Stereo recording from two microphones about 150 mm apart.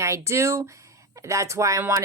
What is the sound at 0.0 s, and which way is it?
Speech, 20° right (ahead or behind).